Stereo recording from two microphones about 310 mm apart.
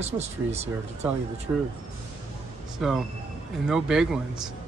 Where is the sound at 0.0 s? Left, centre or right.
Right.